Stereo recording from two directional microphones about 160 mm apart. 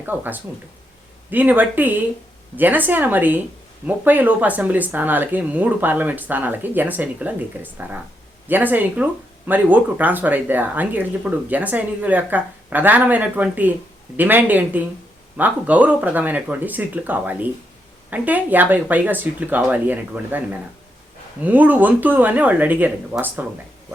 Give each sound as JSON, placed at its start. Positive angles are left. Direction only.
{"t": 0.0, "sound": "speech", "side_deg": -10}